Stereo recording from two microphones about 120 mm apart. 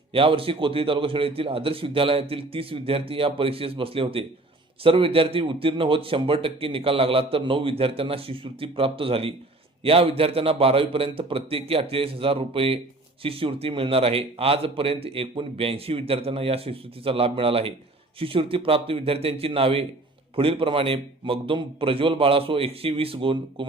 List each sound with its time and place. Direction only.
0.1 s a man's voice: 50° right (ahead or behind)